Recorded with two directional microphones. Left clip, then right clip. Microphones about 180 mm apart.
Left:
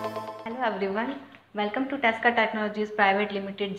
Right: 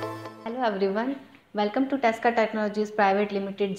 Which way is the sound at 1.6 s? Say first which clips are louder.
Right 1 dB; 45° right (ahead or behind).